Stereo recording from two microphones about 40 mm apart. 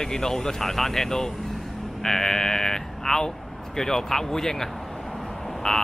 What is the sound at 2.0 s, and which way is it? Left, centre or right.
Speech, centre.